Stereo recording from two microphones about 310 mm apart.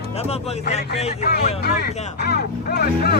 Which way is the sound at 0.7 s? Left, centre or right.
Left.